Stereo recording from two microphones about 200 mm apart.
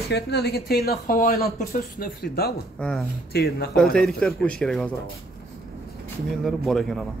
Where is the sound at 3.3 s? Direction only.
50° left (ahead or behind).